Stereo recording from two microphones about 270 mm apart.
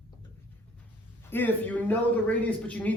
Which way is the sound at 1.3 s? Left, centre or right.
Centre.